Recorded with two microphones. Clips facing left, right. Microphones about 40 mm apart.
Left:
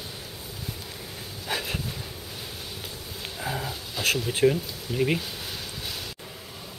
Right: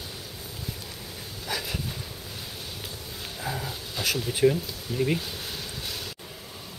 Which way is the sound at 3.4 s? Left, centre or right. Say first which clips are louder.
Left 2 dB; centre.